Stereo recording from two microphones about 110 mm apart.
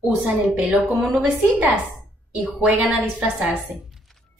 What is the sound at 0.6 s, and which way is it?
Music, centre (ahead or behind).